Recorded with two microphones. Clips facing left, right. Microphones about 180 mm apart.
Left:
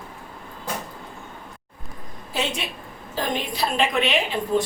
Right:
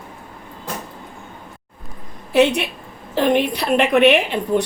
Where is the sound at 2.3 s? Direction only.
65° right (ahead or behind).